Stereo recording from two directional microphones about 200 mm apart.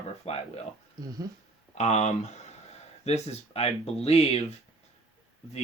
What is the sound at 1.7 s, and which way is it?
Speech, 35° left (ahead or behind).